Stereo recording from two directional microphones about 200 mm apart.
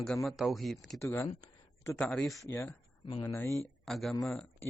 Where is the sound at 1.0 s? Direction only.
15° left (ahead or behind).